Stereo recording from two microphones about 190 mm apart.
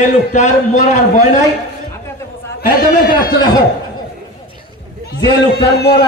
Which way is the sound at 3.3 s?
20° left (ahead or behind).